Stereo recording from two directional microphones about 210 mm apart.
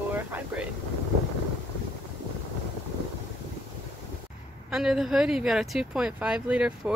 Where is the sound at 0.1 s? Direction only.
10° right (ahead or behind).